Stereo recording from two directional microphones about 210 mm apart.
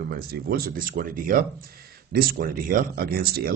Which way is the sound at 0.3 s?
45° right (ahead or behind).